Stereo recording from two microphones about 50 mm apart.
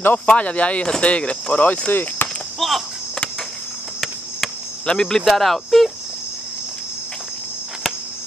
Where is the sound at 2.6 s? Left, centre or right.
Centre.